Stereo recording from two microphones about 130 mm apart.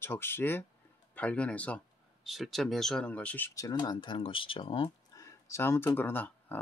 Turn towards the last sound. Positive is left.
turn(degrees=15)  # may be behind; listen again after turning